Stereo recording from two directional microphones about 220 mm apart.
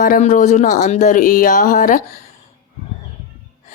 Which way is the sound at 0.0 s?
35° left (ahead or behind).